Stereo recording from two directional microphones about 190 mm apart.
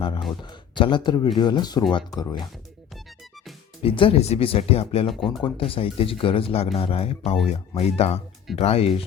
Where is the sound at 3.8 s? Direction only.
30° left (ahead or behind).